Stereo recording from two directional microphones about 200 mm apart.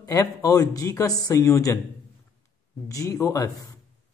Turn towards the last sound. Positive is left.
turn(degrees=15)  # may be behind; listen again after turning